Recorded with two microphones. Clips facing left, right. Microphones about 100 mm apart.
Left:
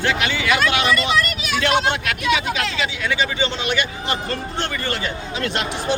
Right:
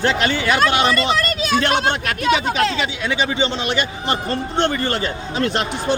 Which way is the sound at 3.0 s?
25° right (ahead or behind).